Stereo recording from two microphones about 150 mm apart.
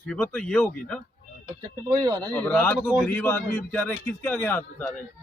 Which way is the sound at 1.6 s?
25° right (ahead or behind).